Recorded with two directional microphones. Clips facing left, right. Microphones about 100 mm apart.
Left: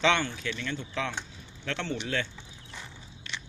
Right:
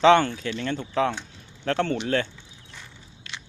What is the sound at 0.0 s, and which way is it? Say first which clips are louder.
Speech: right 9 dB; 40° right (ahead or behind).